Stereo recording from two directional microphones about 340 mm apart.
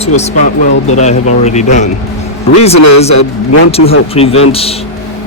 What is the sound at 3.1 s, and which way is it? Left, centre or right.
Speech, left.